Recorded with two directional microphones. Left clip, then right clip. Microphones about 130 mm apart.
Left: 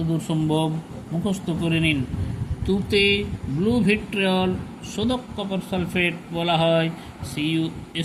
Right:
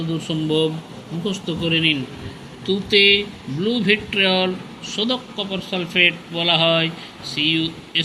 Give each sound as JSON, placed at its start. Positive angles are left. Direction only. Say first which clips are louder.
{"t": 0.3, "sound": "speech", "louder": "right 5 dB", "side_deg": 90}
{"t": 3.7, "sound": "speech", "louder": "right 4 dB", "side_deg": 65}
{"t": 4.9, "sound": "speech", "louder": "right 3 dB", "side_deg": 75}